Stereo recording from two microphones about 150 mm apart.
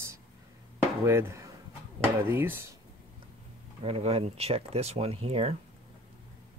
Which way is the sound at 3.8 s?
40° right (ahead or behind).